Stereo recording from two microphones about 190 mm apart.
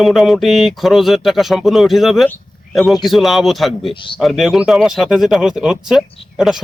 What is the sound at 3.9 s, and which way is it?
Speech, 25° left (ahead or behind).